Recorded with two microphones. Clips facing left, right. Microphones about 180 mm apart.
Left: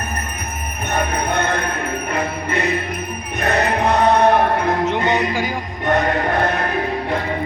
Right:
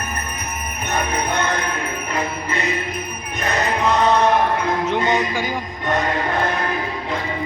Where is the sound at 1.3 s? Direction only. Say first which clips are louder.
Left 2 dB; 55° left (ahead or behind).